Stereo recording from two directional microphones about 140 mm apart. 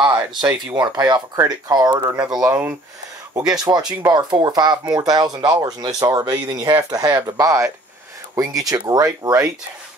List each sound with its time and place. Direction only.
0.0 s a sound: 30° right (ahead or behind)
0.7 s speech: 30° right (ahead or behind)
2.4 s speech: 15° right (ahead or behind)